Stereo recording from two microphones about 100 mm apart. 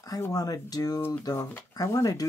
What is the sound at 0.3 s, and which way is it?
Speech, 40° left (ahead or behind).